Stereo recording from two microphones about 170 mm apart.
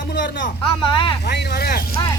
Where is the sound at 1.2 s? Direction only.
75° left (ahead or behind).